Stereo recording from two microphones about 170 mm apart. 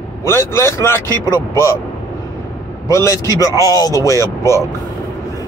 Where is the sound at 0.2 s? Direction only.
15° left (ahead or behind).